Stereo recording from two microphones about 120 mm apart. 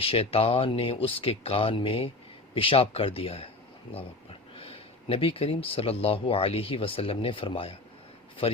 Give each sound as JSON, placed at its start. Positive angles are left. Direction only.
{"t": 0.0, "sound": "speech", "side_deg": 50}